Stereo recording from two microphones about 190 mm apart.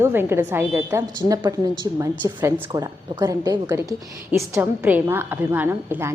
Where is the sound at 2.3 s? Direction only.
10° right (ahead or behind).